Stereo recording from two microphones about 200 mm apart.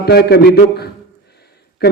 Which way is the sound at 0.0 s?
55° left (ahead or behind).